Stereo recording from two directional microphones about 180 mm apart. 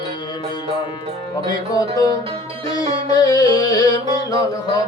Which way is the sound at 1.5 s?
20° left (ahead or behind).